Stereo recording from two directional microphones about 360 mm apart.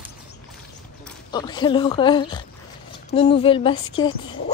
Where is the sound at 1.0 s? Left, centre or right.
Centre.